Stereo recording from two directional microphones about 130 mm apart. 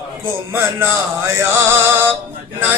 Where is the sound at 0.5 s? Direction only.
20° right (ahead or behind).